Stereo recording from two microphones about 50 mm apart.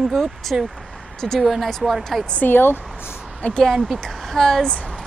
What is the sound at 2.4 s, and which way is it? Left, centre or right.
Speech, left.